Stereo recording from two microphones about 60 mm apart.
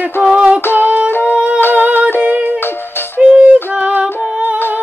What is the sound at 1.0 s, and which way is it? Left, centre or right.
Music, left.